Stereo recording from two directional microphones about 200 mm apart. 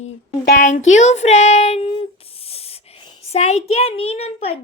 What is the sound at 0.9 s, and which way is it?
Child singing, 35° left (ahead or behind).